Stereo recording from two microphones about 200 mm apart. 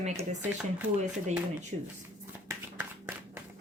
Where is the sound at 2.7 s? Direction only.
10° right (ahead or behind).